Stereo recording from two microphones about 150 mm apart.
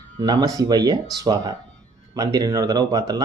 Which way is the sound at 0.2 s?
25° right (ahead or behind).